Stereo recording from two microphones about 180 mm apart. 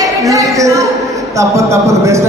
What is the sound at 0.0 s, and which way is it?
A woman's voice, 20° right (ahead or behind).